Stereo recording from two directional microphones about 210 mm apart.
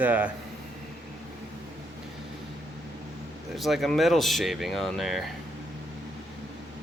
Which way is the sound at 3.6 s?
Centre (ahead or behind).